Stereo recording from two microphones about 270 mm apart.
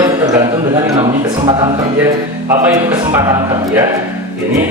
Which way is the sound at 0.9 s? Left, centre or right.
Centre.